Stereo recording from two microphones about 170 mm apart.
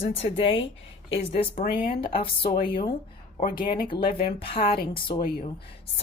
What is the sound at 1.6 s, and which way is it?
Speech, 60° left (ahead or behind).